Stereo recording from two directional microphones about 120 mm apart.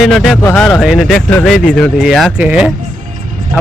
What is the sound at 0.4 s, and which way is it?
Speech, 10° left (ahead or behind).